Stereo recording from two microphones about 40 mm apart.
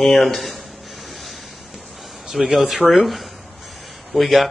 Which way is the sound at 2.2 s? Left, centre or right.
Centre.